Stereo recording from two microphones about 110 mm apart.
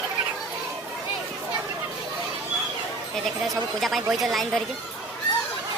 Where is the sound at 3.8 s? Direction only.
Centre (ahead or behind).